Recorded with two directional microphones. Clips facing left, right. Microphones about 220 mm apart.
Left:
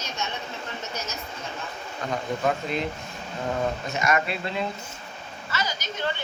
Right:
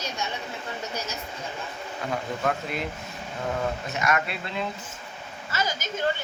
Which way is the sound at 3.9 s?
Centre (ahead or behind).